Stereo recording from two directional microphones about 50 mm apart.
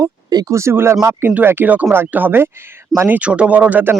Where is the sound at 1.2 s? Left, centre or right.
Right.